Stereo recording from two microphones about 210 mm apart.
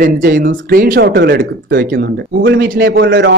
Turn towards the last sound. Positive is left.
turn(degrees=-60)  # may be behind; listen again after turning